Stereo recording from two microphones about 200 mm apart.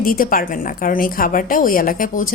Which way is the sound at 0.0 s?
45° left (ahead or behind).